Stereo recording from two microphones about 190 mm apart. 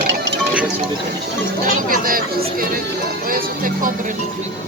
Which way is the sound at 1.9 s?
50° right (ahead or behind).